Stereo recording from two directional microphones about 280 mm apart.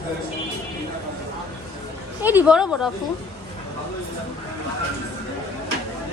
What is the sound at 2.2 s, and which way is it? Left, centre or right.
Speech, centre.